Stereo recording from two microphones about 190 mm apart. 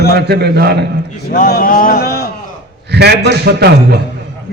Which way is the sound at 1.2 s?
50° left (ahead or behind).